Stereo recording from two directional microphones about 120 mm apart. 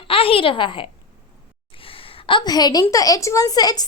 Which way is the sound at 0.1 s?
50° left (ahead or behind).